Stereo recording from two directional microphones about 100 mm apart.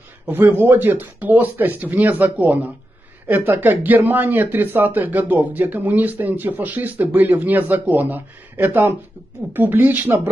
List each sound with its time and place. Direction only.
0.3 s speech: 20° right (ahead or behind)